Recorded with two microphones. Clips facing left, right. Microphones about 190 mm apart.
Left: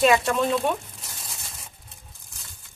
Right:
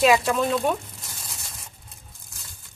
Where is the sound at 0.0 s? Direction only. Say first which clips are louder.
Even; centre (ahead or behind).